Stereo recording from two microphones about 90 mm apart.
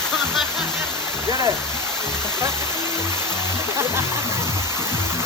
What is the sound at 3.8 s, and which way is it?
Speech, 30° right (ahead or behind).